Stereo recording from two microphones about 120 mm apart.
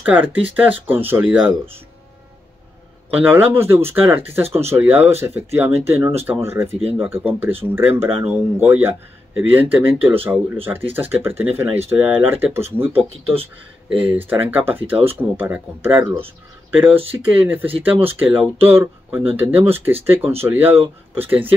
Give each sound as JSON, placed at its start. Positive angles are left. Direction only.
{"t": 0.6, "sound": "speech", "side_deg": -15}
{"t": 3.1, "sound": "speech", "side_deg": -15}
{"t": 17.1, "sound": "speech", "side_deg": -15}